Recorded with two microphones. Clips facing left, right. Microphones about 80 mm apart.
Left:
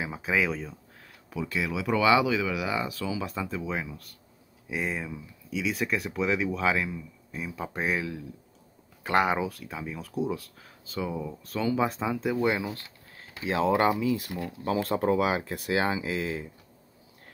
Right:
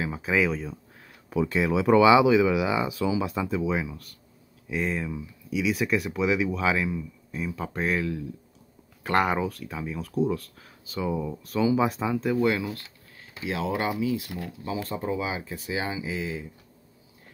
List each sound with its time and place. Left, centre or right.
0.0 s speech: centre
1.3 s speech: right
2.0 s speech: centre
12.4 s speech: centre
13.4 s speech: left
15.0 s speech: left